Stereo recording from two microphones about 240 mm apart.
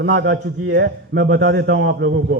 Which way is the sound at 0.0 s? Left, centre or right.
Right.